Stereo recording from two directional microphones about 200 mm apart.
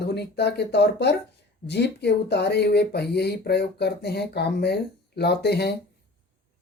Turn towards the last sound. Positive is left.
turn(degrees=55)  # may be behind; listen again after turning